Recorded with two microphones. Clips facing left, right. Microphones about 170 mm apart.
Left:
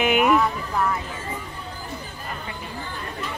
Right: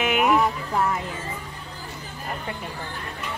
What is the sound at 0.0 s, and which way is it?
Music, centre (ahead or behind).